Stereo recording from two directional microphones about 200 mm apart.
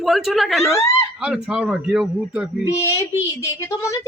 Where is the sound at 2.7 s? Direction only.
15° left (ahead or behind).